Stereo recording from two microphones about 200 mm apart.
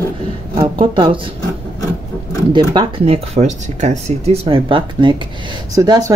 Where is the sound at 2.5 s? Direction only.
25° right (ahead or behind).